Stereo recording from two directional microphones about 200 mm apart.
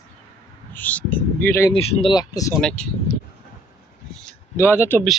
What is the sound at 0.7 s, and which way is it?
Speech, 10° left (ahead or behind).